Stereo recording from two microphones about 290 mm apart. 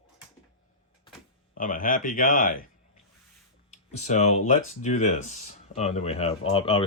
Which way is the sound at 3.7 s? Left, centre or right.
Left.